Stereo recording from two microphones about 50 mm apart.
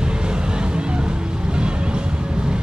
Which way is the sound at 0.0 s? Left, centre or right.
Centre.